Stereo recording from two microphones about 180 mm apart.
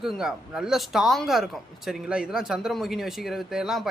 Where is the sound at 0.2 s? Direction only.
5° right (ahead or behind).